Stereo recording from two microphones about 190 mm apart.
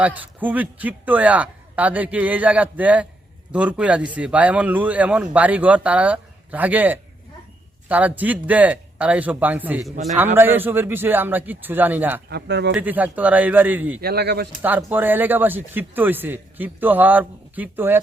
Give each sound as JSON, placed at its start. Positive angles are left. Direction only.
{"t": 0.0, "sound": "speech", "side_deg": -10}
{"t": 12.3, "sound": "speech", "side_deg": -60}
{"t": 12.7, "sound": "speech", "side_deg": -10}
{"t": 14.0, "sound": "speech", "side_deg": -60}
{"t": 14.6, "sound": "speech", "side_deg": -10}